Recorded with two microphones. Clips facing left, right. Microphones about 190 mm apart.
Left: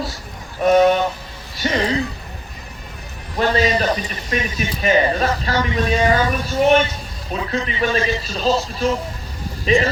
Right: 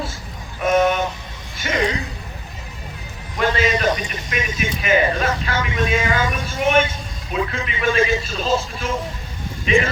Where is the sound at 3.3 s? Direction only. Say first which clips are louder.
Left 2 dB; 35° left (ahead or behind).